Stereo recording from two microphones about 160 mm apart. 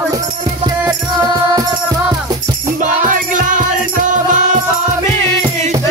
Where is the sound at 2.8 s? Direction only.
55° right (ahead or behind).